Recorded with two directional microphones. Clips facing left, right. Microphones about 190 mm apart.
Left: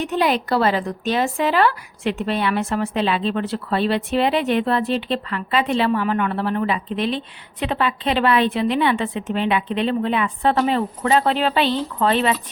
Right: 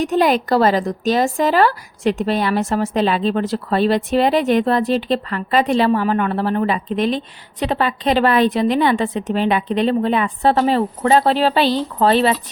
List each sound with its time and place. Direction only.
0.0 s a woman's voice: 45° right (ahead or behind)